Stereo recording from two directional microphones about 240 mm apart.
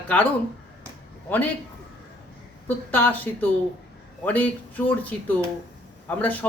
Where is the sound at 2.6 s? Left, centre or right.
Centre.